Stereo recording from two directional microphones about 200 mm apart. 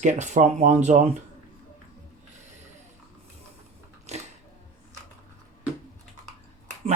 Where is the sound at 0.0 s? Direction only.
35° right (ahead or behind).